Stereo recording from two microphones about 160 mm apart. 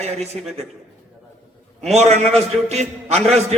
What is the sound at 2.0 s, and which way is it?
Speech, 45° right (ahead or behind).